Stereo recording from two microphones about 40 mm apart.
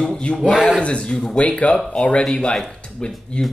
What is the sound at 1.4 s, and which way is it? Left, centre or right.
Speech, left.